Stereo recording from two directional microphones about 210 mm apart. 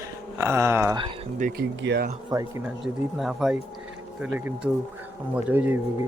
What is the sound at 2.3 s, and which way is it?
Speech, 15° right (ahead or behind).